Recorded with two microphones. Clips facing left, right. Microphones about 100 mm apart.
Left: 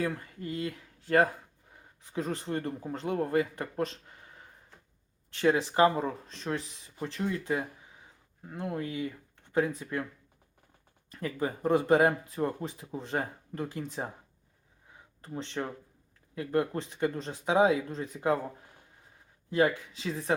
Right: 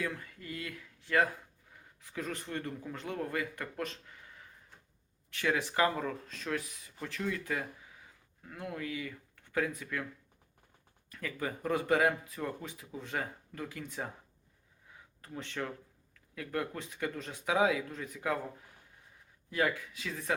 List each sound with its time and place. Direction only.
0.0 s speech: 35° left (ahead or behind)
1.7 s speech: 25° left (ahead or behind)
11.1 s speech: 30° left (ahead or behind)
15.2 s speech: 25° left (ahead or behind)
19.5 s speech: 25° left (ahead or behind)